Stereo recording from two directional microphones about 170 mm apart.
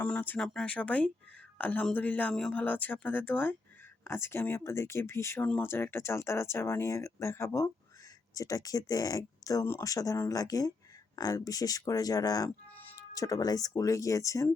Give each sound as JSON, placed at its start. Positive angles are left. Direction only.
{"t": 0.0, "sound": "speech", "side_deg": 10}